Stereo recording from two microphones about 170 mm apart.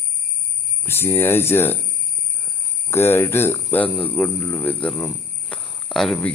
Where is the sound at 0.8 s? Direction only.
15° left (ahead or behind).